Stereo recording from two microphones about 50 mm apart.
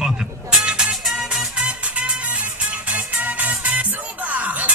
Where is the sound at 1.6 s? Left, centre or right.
Right.